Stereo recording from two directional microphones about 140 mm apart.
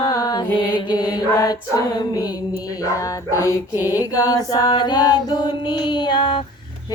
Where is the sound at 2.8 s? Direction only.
25° left (ahead or behind).